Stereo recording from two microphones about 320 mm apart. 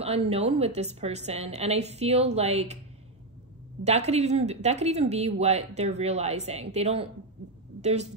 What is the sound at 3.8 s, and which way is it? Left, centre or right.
Speech, centre.